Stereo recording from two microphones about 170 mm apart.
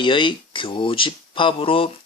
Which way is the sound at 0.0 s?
30° left (ahead or behind).